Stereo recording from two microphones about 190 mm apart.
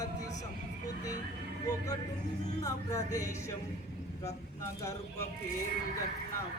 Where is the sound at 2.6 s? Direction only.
20° left (ahead or behind).